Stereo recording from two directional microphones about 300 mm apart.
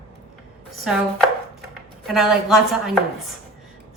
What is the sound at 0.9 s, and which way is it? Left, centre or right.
Speech, centre.